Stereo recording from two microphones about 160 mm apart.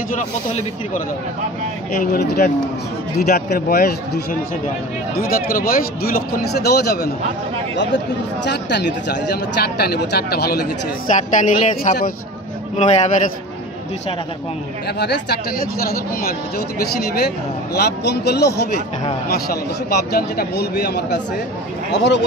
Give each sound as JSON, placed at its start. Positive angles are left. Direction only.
{"t": 0.2, "sound": "speech", "side_deg": 50}
{"t": 2.0, "sound": "a man's voice", "side_deg": 75}
{"t": 11.1, "sound": "speech", "side_deg": 50}
{"t": 15.0, "sound": "a man's voice", "side_deg": 90}
{"t": 15.8, "sound": "speech", "side_deg": 70}
{"t": 17.7, "sound": "a man's voice", "side_deg": 90}
{"t": 19.2, "sound": "speech", "side_deg": 80}